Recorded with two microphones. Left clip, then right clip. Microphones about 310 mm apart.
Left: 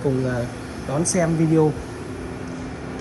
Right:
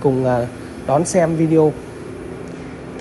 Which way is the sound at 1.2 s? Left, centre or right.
Centre.